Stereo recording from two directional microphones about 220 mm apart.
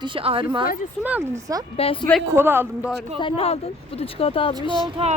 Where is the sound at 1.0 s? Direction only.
10° right (ahead or behind).